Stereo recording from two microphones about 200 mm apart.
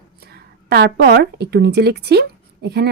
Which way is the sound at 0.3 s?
55° right (ahead or behind).